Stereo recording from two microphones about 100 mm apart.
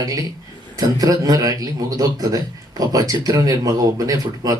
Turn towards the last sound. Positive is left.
turn(degrees=-40)  # may be behind; listen again after turning